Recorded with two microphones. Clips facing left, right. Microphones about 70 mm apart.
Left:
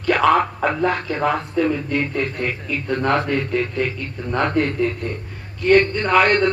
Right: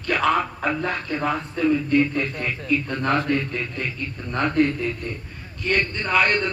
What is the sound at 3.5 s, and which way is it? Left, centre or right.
Speech, left.